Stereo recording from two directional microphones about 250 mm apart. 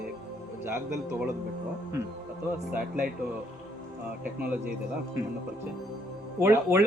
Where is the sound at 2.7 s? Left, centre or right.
Centre.